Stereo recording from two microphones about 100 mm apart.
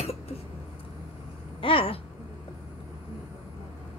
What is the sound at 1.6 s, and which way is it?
Speech, 65° left (ahead or behind).